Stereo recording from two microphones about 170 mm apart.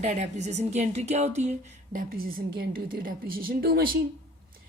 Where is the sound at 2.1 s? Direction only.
60° right (ahead or behind).